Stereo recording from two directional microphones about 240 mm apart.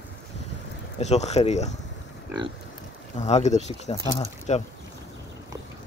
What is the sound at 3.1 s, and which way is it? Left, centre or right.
Speech, left.